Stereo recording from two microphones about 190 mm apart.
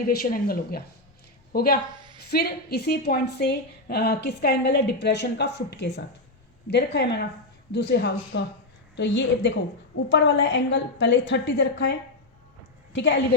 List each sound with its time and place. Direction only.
0.1 s a woman's voice: 50° left (ahead or behind); by 13.2 s 70° left (ahead or behind)